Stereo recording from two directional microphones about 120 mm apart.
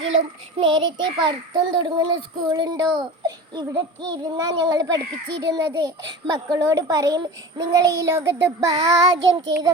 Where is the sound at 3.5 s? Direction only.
35° right (ahead or behind).